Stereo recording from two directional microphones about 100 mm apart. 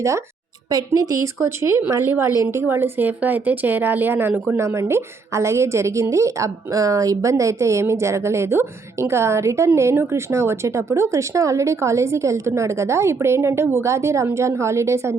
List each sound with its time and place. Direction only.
0.7 s a woman's voice: 35° right (ahead or behind)